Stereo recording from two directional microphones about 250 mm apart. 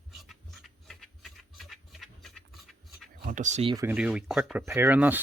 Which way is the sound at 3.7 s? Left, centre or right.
Centre.